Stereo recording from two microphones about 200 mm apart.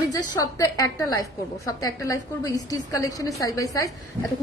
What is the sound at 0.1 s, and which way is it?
A woman's voice, 15° left (ahead or behind).